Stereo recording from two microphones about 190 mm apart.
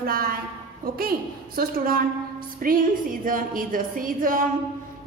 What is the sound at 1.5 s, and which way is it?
A woman's voice, 50° right (ahead or behind).